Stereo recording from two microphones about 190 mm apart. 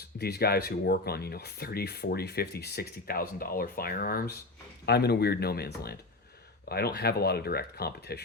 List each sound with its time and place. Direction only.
0.2 s speech: 55° left (ahead or behind)